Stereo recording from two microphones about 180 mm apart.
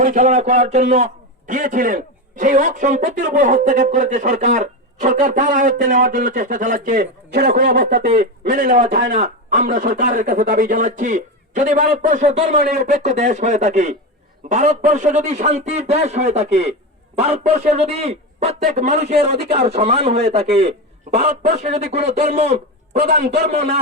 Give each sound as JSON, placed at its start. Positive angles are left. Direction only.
{"t": 0.0, "sound": "a man's voice", "side_deg": -45}
{"t": 7.4, "sound": "a man's voice", "side_deg": -55}